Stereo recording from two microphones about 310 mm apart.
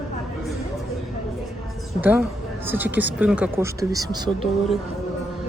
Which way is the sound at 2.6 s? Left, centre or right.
Centre.